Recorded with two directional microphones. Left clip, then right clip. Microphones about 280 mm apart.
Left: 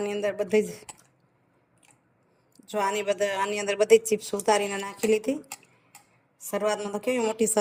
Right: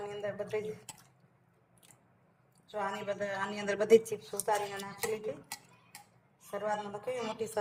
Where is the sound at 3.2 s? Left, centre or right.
Left.